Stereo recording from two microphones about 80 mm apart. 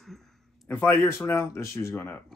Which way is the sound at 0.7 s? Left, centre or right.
Centre.